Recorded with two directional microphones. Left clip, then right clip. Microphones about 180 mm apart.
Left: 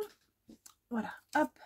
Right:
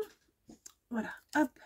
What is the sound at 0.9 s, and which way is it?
Speech, 30° left (ahead or behind).